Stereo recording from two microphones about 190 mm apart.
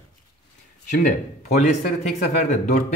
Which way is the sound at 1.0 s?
40° left (ahead or behind).